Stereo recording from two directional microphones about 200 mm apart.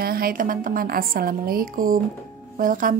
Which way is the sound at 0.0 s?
45° right (ahead or behind).